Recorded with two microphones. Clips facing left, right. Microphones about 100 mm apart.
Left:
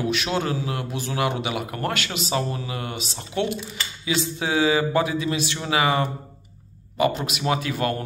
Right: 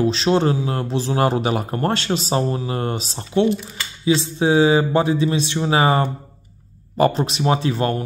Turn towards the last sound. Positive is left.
turn(degrees=-30)  # may be behind; listen again after turning